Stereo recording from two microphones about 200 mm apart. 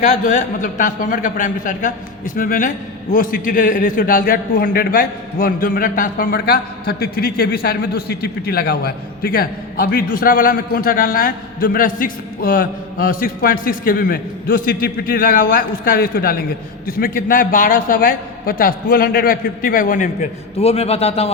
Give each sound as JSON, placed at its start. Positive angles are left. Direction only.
{"t": 0.0, "sound": "a man's voice", "side_deg": 40}
{"t": 20.6, "sound": "a man's voice", "side_deg": 30}